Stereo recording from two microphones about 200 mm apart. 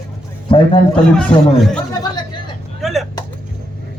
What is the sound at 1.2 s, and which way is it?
Speech, 5° left (ahead or behind).